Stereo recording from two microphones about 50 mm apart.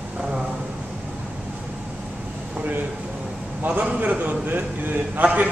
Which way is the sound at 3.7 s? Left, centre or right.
Right.